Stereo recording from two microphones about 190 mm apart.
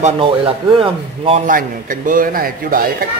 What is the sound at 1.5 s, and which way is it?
Speech, 45° right (ahead or behind).